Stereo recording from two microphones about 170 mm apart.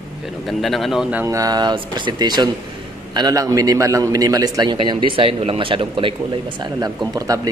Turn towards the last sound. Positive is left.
turn(degrees=-20)  # may be behind; listen again after turning